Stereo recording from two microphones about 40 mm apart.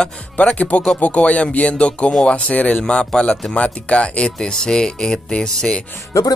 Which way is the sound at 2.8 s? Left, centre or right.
Centre.